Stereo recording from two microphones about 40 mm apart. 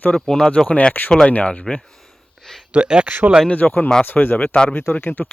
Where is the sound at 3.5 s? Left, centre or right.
Left.